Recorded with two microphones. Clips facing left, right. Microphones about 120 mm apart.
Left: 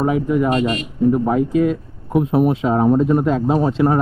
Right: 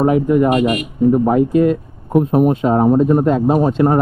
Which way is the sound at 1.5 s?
55° right (ahead or behind).